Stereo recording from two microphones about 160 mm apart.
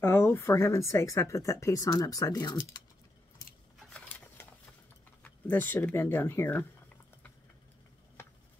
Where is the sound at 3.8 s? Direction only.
10° left (ahead or behind).